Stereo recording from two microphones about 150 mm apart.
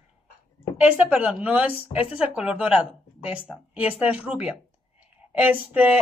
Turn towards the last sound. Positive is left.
turn(degrees=-10)  # may be behind; listen again after turning